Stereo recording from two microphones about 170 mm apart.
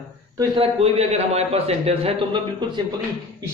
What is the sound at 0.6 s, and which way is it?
A man's voice, 35° right (ahead or behind).